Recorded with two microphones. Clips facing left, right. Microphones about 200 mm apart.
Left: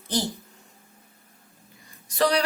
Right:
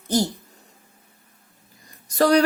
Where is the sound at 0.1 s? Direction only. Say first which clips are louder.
Right 6 dB; 45° right (ahead or behind).